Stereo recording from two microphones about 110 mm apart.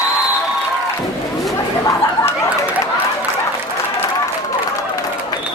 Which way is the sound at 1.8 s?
30° left (ahead or behind).